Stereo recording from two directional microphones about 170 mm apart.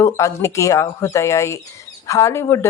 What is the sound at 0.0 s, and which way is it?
Speech, 20° left (ahead or behind).